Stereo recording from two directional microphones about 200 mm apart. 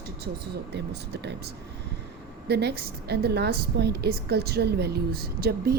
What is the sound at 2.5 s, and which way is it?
A woman's voice, 55° right (ahead or behind).